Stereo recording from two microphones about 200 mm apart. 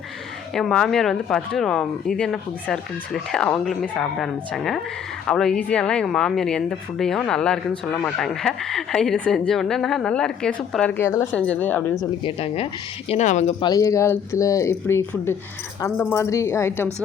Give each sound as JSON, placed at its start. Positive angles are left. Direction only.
{"t": 0.5, "sound": "speech", "side_deg": 5}
{"t": 12.2, "sound": "speech", "side_deg": 30}
{"t": 13.6, "sound": "speech", "side_deg": 20}